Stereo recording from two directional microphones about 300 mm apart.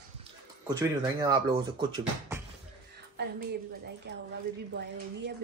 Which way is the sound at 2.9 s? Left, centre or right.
Right.